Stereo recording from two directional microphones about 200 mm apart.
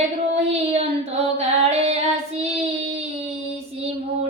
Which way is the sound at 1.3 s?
30° right (ahead or behind).